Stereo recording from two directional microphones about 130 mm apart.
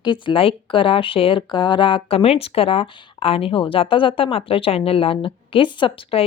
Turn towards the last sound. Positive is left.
turn(degrees=40)  # may be behind; listen again after turning